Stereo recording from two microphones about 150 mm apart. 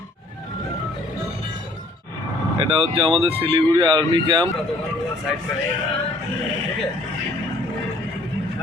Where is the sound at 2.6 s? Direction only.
35° right (ahead or behind).